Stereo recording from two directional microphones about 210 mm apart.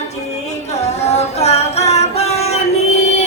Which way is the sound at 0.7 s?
30° left (ahead or behind).